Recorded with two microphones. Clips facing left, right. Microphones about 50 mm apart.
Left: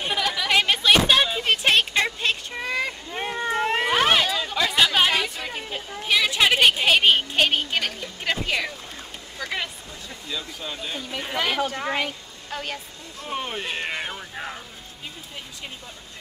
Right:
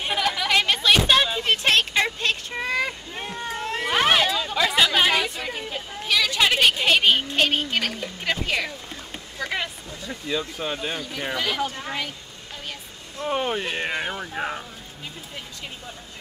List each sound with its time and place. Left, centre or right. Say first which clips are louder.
0.2 s chatter: right 2 dB; centre
0.5 s a sound: left 1 dB; centre
3.3 s cat: left 6 dB; left
3.9 s chatter: right 3 dB; centre
5.7 s a sound: left 3 dB; centre
8.2 s music: even; centre
10.3 s speech: right 5 dB; right
11.3 s speech: left 3 dB; left
13.3 s speech: right 4 dB; centre